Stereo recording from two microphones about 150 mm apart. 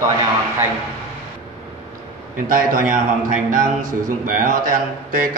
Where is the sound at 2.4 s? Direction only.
65° right (ahead or behind).